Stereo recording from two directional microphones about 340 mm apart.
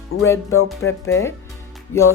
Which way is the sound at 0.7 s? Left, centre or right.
Centre.